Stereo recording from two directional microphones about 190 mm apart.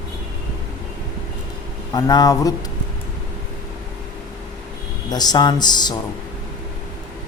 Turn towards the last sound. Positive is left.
turn(degrees=20)  # may be behind; listen again after turning